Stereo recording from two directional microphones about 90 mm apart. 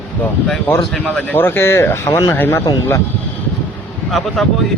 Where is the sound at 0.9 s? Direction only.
10° left (ahead or behind).